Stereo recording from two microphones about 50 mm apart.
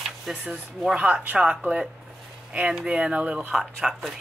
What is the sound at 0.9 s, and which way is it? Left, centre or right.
Speech, right.